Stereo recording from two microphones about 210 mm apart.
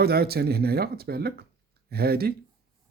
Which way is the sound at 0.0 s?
50° right (ahead or behind).